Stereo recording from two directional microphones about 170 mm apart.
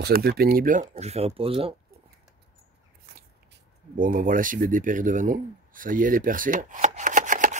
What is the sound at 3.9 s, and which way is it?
Speech, 55° right (ahead or behind).